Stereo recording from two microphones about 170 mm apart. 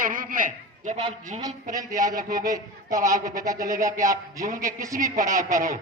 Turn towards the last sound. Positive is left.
turn(degrees=-20)  # may be behind; listen again after turning